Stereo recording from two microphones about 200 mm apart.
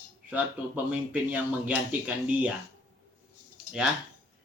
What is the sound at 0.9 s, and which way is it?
Speech, 5° right (ahead or behind).